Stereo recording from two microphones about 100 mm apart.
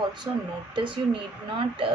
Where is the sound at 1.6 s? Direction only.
60° right (ahead or behind).